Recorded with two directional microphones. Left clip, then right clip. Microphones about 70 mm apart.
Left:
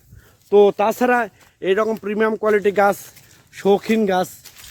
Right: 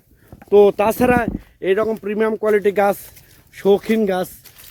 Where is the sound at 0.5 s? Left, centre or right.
Right.